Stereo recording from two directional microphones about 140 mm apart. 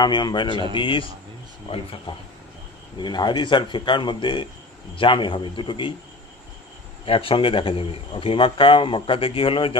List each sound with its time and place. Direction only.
0.0 s speech: 30° left (ahead or behind)
7.1 s speech: 40° left (ahead or behind)